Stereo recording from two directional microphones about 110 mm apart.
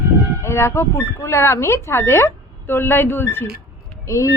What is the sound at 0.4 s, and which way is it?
Speech, 25° left (ahead or behind).